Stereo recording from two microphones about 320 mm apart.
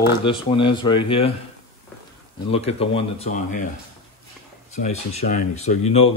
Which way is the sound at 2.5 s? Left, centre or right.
Centre.